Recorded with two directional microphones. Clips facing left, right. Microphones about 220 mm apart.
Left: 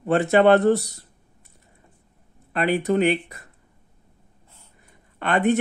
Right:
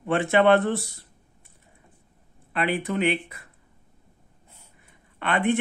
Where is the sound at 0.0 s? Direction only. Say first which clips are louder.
Left 3 dB; 40° left (ahead or behind).